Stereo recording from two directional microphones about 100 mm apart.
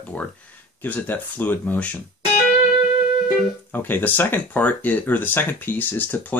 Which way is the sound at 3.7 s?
20° left (ahead or behind).